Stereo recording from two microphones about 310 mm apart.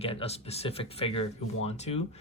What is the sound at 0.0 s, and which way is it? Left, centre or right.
Speech, centre.